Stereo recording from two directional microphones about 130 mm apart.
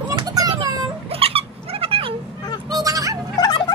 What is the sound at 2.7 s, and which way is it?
Fowl, 25° right (ahead or behind).